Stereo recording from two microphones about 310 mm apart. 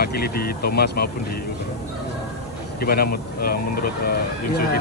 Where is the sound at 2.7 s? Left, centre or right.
Left.